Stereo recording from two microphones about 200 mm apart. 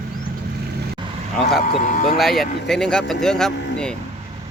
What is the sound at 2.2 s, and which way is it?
Speech, centre (ahead or behind).